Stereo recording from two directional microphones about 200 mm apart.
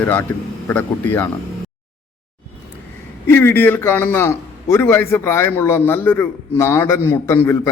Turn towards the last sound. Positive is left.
turn(degrees=15)  # may be behind; listen again after turning